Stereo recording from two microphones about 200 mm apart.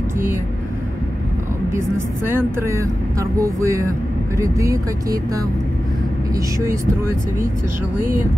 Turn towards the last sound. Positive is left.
turn(degrees=-15)  # may be behind; listen again after turning